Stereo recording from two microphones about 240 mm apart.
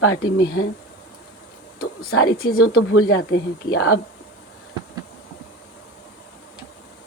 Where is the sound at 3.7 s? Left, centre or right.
Left.